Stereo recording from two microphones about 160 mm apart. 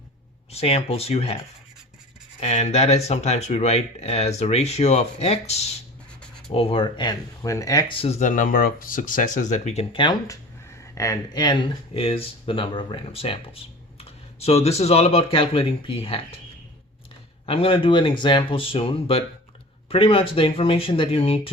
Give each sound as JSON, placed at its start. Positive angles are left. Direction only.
{"t": 0.5, "sound": "speech", "side_deg": 40}
{"t": 2.4, "sound": "speech", "side_deg": 40}
{"t": 11.9, "sound": "speech", "side_deg": 35}
{"t": 17.4, "sound": "speech", "side_deg": 35}